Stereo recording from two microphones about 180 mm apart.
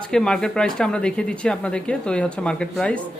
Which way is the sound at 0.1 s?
5° left (ahead or behind).